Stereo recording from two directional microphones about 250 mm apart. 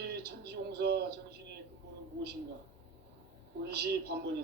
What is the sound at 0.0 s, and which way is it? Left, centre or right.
Speech, right.